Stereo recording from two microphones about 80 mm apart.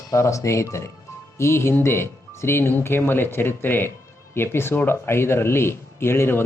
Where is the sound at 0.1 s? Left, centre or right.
Left.